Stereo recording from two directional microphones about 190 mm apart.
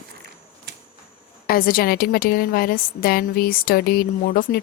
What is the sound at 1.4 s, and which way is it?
A woman's voice, 50° left (ahead or behind).